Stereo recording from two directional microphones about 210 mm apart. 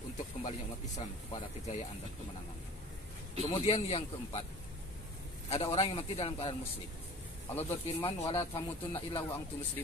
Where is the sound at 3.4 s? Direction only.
30° left (ahead or behind).